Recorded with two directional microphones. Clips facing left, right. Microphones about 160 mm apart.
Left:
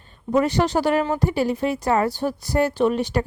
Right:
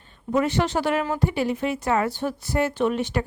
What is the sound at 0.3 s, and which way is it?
A woman's voice, 35° left (ahead or behind).